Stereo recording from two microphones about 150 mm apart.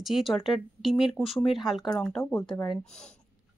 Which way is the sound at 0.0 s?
Centre (ahead or behind).